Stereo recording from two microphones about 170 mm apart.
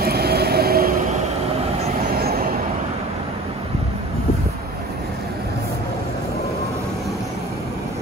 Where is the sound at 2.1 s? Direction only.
65° right (ahead or behind).